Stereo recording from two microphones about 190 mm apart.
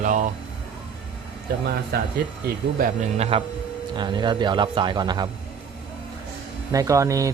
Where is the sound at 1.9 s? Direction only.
55° right (ahead or behind).